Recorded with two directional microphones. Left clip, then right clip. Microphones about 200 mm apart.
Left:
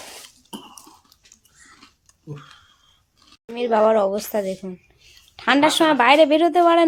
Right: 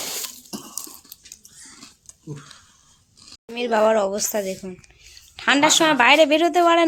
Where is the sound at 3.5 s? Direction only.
10° left (ahead or behind).